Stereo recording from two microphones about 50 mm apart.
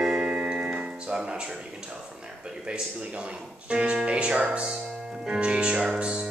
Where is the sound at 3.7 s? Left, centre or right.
Right.